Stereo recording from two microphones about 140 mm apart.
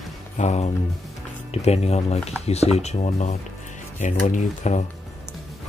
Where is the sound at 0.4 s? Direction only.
55° left (ahead or behind).